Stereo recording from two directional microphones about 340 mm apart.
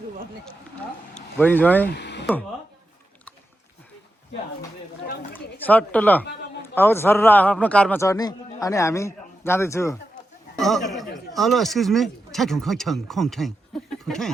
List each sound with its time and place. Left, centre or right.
1.4 s speech: centre
1.9 s speech: left
5.0 s speech: left
5.6 s a man's voice: centre